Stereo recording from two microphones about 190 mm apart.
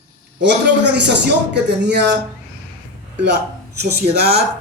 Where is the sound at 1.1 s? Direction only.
65° right (ahead or behind).